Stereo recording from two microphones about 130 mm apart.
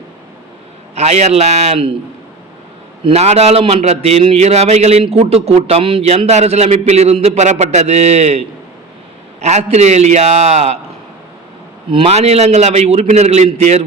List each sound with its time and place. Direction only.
0.9 s a man's voice: 60° right (ahead or behind)
3.0 s a man's voice: 55° right (ahead or behind)
9.4 s a man's voice: 60° right (ahead or behind)
11.9 s a man's voice: 45° right (ahead or behind); by 13.8 s 65° right (ahead or behind)